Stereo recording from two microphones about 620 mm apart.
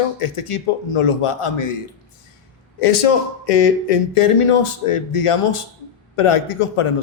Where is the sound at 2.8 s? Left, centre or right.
Left.